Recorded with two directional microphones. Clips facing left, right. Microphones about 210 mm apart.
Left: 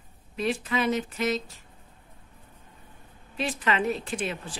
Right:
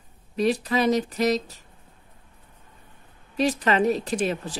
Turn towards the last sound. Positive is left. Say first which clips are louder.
# right 6 dB
turn(degrees=-40)  # may be behind; listen again after turning